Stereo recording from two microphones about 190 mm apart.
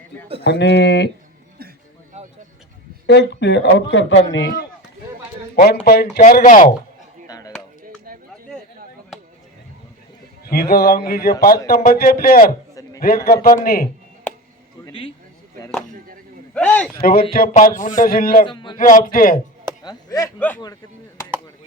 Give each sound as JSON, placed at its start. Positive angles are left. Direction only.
{"t": 0.4, "sound": "a man's voice", "side_deg": 65}
{"t": 2.1, "sound": "a sound", "side_deg": -35}
{"t": 3.1, "sound": "a man's voice", "side_deg": 65}
{"t": 5.8, "sound": "a man's voice", "side_deg": 55}
{"t": 7.3, "sound": "chop", "side_deg": 20}
{"t": 10.4, "sound": "a man's voice", "side_deg": 55}
{"t": 14.8, "sound": "a sound", "side_deg": 30}
{"t": 16.6, "sound": "speech", "side_deg": 5}
{"t": 17.0, "sound": "a man's voice", "side_deg": 50}
{"t": 18.4, "sound": "speech", "side_deg": 25}
{"t": 18.8, "sound": "a man's voice", "side_deg": 45}
{"t": 19.8, "sound": "speech", "side_deg": 20}